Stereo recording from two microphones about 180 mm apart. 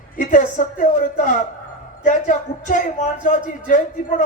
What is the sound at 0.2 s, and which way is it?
A woman's voice, 45° left (ahead or behind).